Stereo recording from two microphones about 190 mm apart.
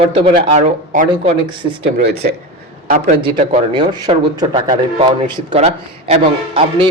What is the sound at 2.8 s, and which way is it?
Speech, 50° right (ahead or behind).